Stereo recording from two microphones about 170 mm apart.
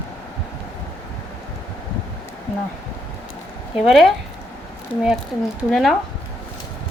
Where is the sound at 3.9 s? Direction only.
Centre (ahead or behind).